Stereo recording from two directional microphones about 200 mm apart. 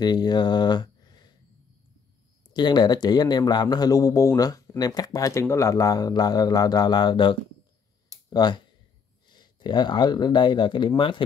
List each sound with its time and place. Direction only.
0.0 s speech: 20° left (ahead or behind)
2.5 s speech: 20° left (ahead or behind)